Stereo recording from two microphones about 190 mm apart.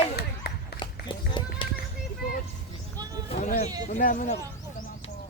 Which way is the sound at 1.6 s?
25° left (ahead or behind).